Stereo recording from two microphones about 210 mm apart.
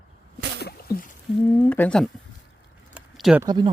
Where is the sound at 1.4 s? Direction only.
5° left (ahead or behind).